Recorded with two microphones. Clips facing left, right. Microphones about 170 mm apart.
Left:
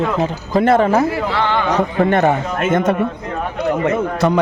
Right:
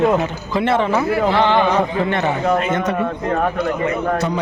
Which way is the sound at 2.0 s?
50° left (ahead or behind).